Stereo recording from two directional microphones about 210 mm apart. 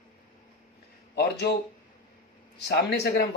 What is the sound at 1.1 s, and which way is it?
Speech, 50° left (ahead or behind).